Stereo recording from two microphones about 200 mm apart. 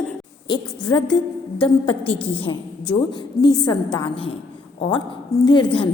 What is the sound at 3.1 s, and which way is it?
A woman's voice, 20° left (ahead or behind).